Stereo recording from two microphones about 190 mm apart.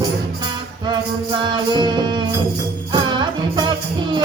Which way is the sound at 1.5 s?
25° right (ahead or behind).